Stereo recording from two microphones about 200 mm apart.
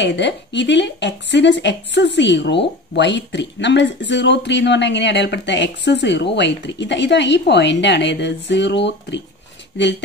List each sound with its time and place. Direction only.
0.0 s a woman's voice: 60° left (ahead or behind)